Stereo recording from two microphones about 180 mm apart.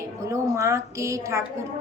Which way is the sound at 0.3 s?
15° right (ahead or behind).